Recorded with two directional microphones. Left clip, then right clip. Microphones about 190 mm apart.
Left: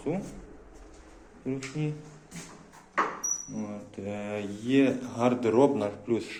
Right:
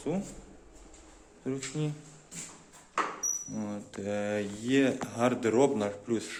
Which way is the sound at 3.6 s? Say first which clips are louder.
Even; 45° right (ahead or behind).